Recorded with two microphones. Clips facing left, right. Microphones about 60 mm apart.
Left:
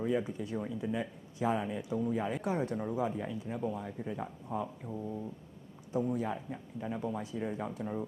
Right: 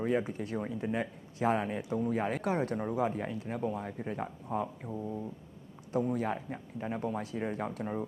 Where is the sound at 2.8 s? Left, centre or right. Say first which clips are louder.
Right 2 dB; right.